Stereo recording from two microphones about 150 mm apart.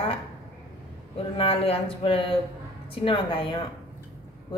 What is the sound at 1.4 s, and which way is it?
A woman's voice, 40° left (ahead or behind).